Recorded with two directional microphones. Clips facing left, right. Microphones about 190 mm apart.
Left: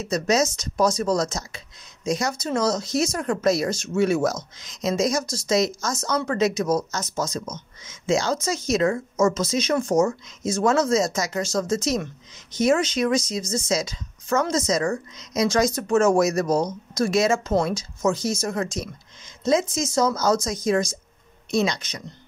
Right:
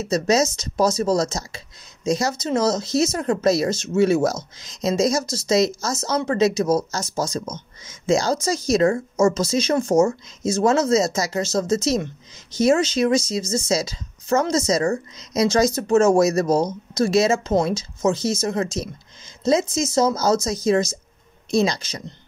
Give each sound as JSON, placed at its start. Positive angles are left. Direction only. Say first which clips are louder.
{"t": 0.1, "sound": "speech", "louder": "right 2 dB", "side_deg": -25}